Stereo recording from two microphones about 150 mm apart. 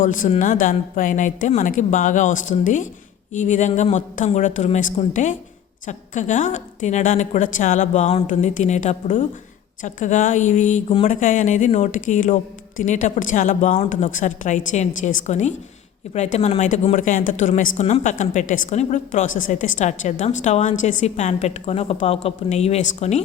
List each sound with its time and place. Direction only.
0.0 s a woman's voice: 60° left (ahead or behind)
17.5 s a woman's voice: 50° left (ahead or behind)